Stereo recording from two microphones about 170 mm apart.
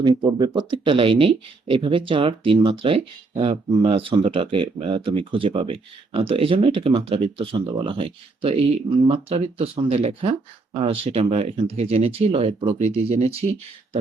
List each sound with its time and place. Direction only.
0.0 s speech: 25° right (ahead or behind)